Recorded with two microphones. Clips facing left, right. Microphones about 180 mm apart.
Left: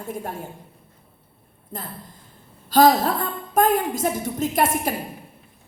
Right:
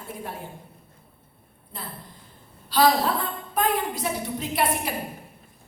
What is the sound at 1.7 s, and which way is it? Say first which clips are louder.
A woman's voice: left 4 dB; 45° left (ahead or behind).